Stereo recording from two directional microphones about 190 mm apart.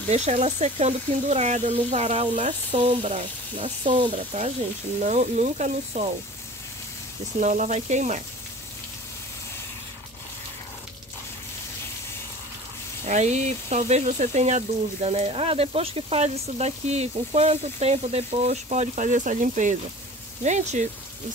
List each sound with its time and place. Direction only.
0.1 s speech: 35° right (ahead or behind)
4.2 s speech: 35° right (ahead or behind)
7.3 s speech: 40° right (ahead or behind)
13.0 s speech: 35° right (ahead or behind)